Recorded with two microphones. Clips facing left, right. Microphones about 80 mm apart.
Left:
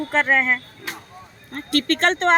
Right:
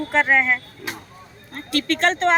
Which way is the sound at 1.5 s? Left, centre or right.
Left.